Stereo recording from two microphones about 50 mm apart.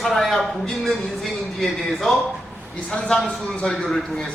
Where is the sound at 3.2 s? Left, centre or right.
Centre.